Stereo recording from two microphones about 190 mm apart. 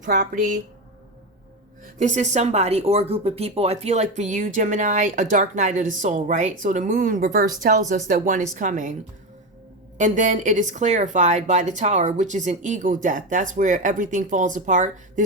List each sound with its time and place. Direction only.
0.0 s speech: 45° right (ahead or behind)
1.8 s speech: 40° right (ahead or behind)
10.0 s speech: 40° right (ahead or behind)